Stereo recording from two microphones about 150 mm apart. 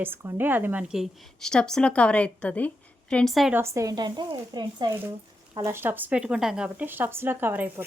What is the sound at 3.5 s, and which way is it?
Speech, 20° right (ahead or behind).